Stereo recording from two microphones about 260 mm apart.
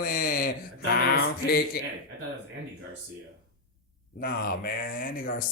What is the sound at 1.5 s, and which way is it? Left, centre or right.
Speech, left.